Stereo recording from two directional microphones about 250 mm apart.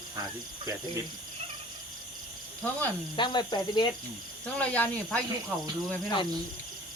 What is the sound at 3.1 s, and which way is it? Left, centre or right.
Cricket, centre.